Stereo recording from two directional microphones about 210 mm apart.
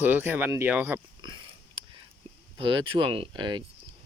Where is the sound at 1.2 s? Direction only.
20° right (ahead or behind).